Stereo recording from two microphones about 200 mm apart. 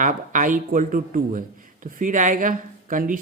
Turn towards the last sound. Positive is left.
turn(degrees=-40)  # may be behind; listen again after turning